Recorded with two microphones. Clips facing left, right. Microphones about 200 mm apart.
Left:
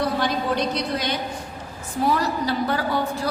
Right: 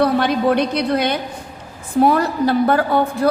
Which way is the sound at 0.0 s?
60° right (ahead or behind).